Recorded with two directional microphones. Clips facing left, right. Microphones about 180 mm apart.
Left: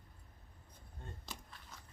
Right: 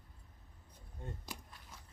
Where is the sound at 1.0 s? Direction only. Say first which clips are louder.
Right 4 dB; 10° right (ahead or behind).